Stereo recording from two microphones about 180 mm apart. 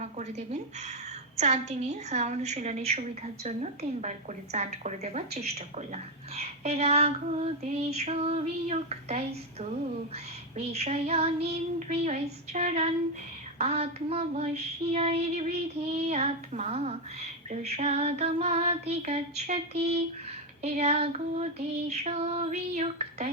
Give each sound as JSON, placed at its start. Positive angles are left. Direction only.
{"t": 0.0, "sound": "a woman's voice", "side_deg": -40}
{"t": 10.7, "sound": "a woman's voice", "side_deg": -35}